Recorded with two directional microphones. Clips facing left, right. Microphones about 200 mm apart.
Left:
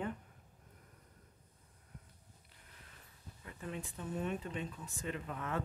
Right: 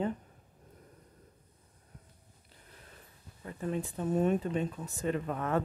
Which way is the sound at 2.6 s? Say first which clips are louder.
Right 6 dB; 35° right (ahead or behind).